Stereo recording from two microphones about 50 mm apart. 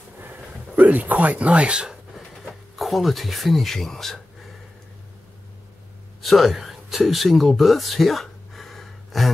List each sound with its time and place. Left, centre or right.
0.2 s speech: right; by 2.0 s centre
2.1 s speech: centre
6.2 s speech: centre